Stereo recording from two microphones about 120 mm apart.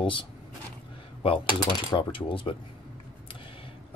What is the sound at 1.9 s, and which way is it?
Speech, 45° left (ahead or behind).